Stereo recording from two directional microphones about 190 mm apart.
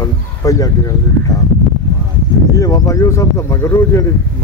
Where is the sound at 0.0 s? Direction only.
20° left (ahead or behind).